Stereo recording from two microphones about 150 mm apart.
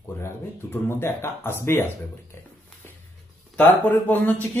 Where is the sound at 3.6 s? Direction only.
10° left (ahead or behind).